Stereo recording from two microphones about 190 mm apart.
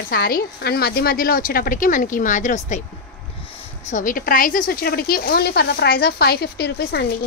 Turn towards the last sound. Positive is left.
turn(degrees=60)  # may be behind; listen again after turning